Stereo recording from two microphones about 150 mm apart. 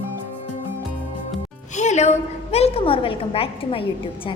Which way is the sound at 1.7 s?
50° left (ahead or behind).